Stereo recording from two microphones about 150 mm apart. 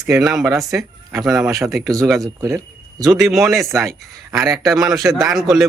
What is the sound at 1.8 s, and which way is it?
Speech, 20° right (ahead or behind).